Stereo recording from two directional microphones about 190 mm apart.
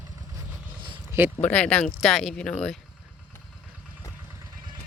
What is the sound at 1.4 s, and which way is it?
Speech, 5° left (ahead or behind).